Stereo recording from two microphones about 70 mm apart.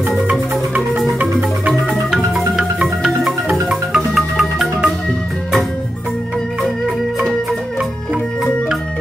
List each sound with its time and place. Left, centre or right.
0.9 s music: centre
2.5 s marimba: centre
3.6 s music: centre